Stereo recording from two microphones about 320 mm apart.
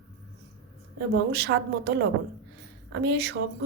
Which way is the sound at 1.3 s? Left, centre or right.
Right.